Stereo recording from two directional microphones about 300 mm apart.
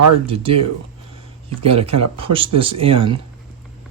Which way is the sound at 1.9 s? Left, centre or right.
Right.